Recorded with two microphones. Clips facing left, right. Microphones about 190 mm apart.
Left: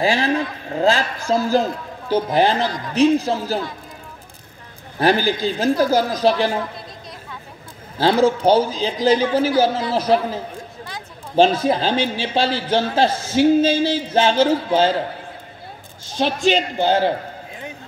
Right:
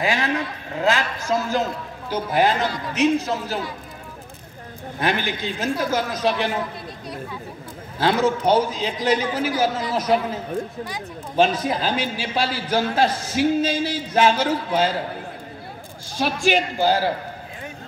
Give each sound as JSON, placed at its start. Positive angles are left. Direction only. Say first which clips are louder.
{"t": 0.0, "sound": "a man's voice", "louder": "left 4 dB", "side_deg": 30}
{"t": 5.0, "sound": "a man's voice", "louder": "left 7 dB", "side_deg": 35}
{"t": 8.0, "sound": "a man's voice", "louder": "left 4 dB", "side_deg": 30}
{"t": 16.1, "sound": "a man's voice", "louder": "left 3 dB", "side_deg": 20}